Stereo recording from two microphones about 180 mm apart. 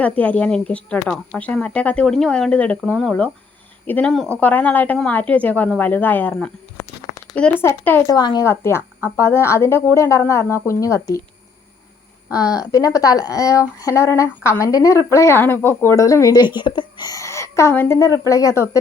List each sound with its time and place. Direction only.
0.0 s speech: 10° left (ahead or behind)
12.4 s speech: 20° left (ahead or behind)